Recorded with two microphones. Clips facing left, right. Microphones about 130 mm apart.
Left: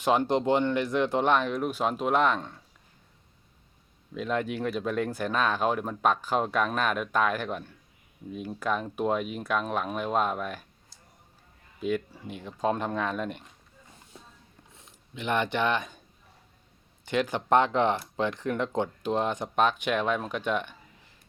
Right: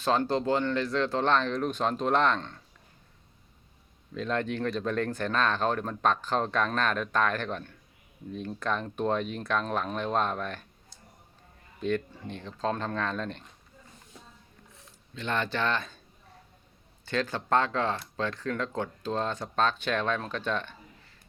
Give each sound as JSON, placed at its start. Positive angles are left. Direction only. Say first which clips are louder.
{"t": 0.0, "sound": "speech", "louder": "left 2 dB", "side_deg": 15}
{"t": 4.1, "sound": "speech", "louder": "left 1 dB", "side_deg": 10}
{"t": 11.8, "sound": "speech", "louder": "even", "side_deg": 10}
{"t": 14.8, "sound": "speech", "louder": "left 1 dB", "side_deg": 20}
{"t": 17.1, "sound": "speech", "louder": "left 3 dB", "side_deg": 15}